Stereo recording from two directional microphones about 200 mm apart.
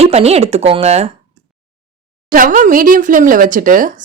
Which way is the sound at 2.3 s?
40° right (ahead or behind).